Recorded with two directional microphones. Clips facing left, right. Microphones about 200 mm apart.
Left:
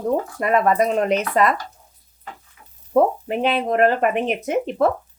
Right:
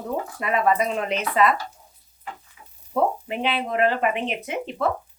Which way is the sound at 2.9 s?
45° left (ahead or behind).